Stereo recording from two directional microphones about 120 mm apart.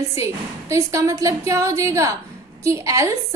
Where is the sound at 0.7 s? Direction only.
25° right (ahead or behind).